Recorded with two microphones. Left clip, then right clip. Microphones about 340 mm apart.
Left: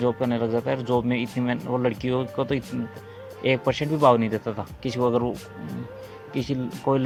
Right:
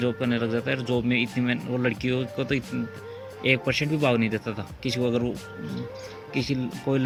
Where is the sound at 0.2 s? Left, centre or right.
Centre.